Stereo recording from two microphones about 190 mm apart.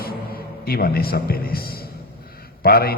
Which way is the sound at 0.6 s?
55° left (ahead or behind).